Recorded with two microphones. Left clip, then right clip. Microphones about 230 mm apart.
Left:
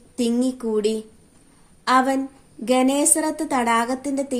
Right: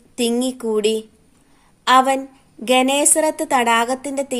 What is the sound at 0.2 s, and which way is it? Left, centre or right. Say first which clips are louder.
A woman's voice: right 3 dB; right.